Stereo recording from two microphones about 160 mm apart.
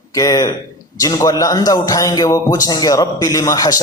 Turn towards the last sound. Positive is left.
turn(degrees=20)  # may be behind; listen again after turning